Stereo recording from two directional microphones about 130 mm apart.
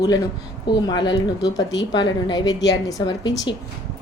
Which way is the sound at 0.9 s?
30° left (ahead or behind).